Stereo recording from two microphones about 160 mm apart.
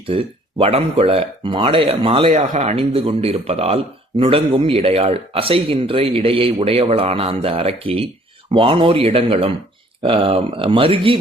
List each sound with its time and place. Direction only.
0.1 s a man's voice: 35° right (ahead or behind)